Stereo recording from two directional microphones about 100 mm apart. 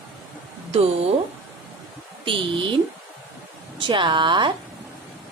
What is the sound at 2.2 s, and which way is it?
Speech, 55° right (ahead or behind).